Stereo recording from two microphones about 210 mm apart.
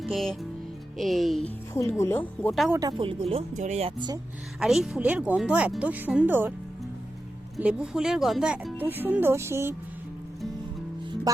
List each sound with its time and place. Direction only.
0.0 s speech: centre (ahead or behind)
1.7 s speech: 15° left (ahead or behind)
2.7 s speech: 20° right (ahead or behind)
4.6 s speech: centre (ahead or behind)
7.5 s speech: 5° right (ahead or behind)